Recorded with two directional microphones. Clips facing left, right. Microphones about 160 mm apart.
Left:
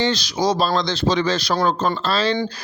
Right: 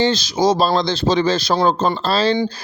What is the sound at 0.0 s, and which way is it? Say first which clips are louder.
Speech: right 4 dB; 25° right (ahead or behind).